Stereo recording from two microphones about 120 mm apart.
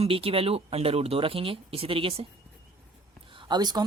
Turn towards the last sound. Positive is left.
turn(degrees=-35)  # may be behind; listen again after turning